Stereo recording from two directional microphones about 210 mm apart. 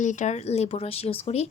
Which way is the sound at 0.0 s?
35° left (ahead or behind).